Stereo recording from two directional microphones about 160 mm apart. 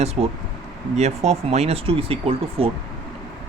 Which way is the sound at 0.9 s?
45° right (ahead or behind).